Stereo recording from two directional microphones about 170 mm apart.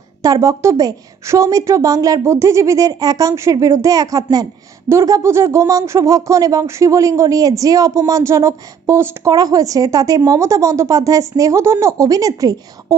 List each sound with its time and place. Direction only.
0.2 s a woman's voice: 20° right (ahead or behind)